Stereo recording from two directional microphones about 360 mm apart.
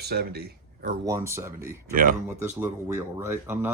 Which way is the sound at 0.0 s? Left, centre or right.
Right.